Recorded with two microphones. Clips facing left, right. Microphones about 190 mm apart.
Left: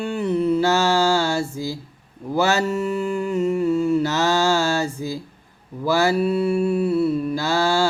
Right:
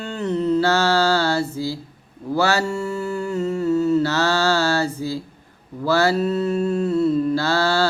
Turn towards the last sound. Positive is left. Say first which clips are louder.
# right 1 dB
turn(degrees=15)  # may be behind; listen again after turning